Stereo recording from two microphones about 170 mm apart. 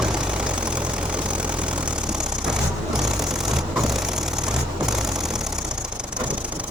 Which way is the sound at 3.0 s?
5° right (ahead or behind).